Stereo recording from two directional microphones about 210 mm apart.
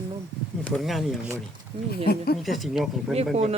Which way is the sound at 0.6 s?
5° left (ahead or behind).